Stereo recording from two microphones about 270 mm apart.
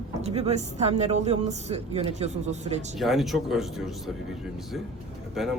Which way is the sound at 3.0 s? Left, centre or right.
Centre.